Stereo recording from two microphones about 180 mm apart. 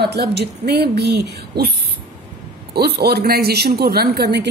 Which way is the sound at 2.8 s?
65° right (ahead or behind).